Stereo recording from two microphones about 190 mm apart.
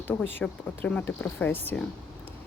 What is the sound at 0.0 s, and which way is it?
Speech, 10° left (ahead or behind).